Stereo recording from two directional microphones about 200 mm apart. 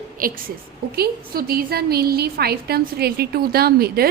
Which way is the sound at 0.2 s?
45° right (ahead or behind).